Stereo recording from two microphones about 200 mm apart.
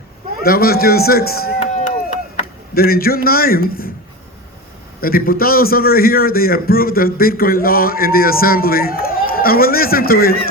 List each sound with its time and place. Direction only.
0.4 s a man's voice: 50° left (ahead or behind)
1.5 s chop: 35° left (ahead or behind)
3.2 s a man's voice: 45° left (ahead or behind)
4.9 s a man's voice: 45° left (ahead or behind)